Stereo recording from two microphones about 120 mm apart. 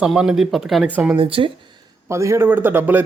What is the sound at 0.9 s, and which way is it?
Speech, 15° right (ahead or behind).